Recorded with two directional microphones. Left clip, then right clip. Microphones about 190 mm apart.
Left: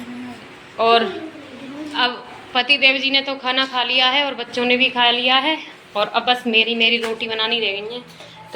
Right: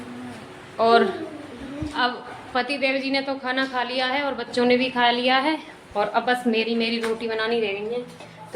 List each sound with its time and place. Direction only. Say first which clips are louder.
0.8 s a woman's voice: left 2 dB; 15° right (ahead or behind)